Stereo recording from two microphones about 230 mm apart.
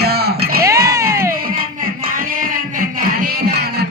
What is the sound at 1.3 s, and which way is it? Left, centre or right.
Music, right.